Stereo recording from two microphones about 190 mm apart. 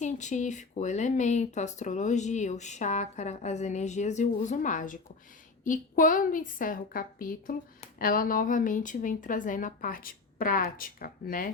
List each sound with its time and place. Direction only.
0.0 s speech: 40° left (ahead or behind)